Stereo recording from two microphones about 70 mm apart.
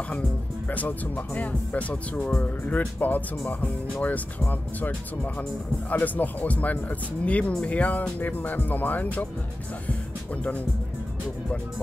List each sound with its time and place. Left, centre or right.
0.7 s speech: left